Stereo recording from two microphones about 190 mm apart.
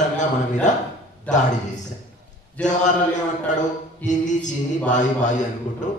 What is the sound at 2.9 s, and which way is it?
A man's voice, 40° left (ahead or behind).